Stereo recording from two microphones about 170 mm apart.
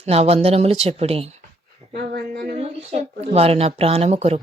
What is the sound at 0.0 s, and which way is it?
A child's voice, 35° right (ahead or behind).